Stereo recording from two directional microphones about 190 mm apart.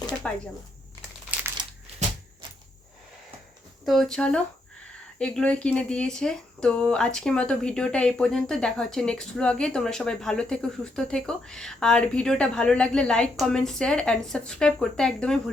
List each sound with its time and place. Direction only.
0.2 s speech: 5° left (ahead or behind)
1.6 s crushing: 25° right (ahead or behind)
3.8 s speech: centre (ahead or behind)